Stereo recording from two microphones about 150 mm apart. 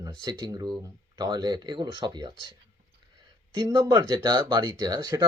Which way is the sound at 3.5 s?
30° right (ahead or behind).